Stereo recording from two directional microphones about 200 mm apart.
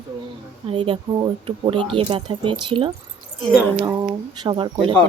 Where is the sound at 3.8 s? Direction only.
20° right (ahead or behind).